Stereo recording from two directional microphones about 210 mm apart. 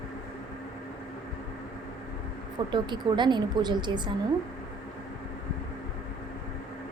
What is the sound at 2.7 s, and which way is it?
A woman's voice, 20° right (ahead or behind).